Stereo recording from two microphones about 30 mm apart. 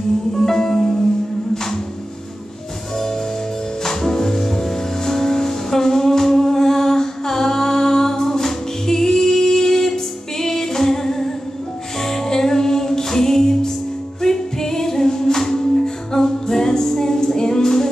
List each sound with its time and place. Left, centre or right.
0.4 s music: centre
3.8 s music: centre